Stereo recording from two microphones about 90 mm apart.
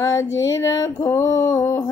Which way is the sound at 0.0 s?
35° left (ahead or behind).